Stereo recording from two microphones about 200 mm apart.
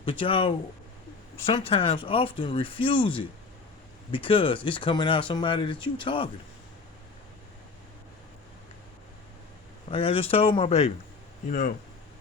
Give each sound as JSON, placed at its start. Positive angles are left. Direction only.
{"t": 0.0, "sound": "speech", "side_deg": 25}
{"t": 9.9, "sound": "speech", "side_deg": 30}